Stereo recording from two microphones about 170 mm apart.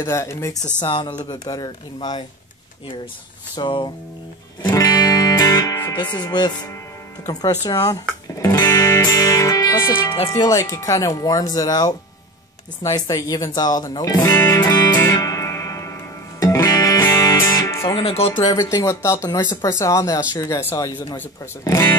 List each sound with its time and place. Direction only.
0.0 s speech: 15° left (ahead or behind)
0.7 s speech: 25° left (ahead or behind)
3.5 s speech: 25° left (ahead or behind)
4.6 s music: 20° left (ahead or behind)
6.1 s speech: 25° left (ahead or behind)
10.1 s speech: 30° left (ahead or behind)
12.8 s music: 20° left (ahead or behind)
18.4 s speech: 20° left (ahead or behind)